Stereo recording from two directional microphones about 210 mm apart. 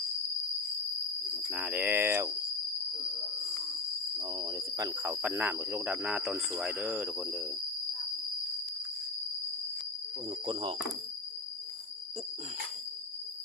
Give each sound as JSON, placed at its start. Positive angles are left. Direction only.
{"t": 1.5, "sound": "speech", "side_deg": -5}
{"t": 4.2, "sound": "speech", "side_deg": -20}
{"t": 10.4, "sound": "speech", "side_deg": -25}